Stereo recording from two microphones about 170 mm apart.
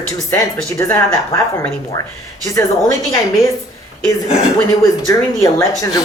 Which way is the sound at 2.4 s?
20° left (ahead or behind).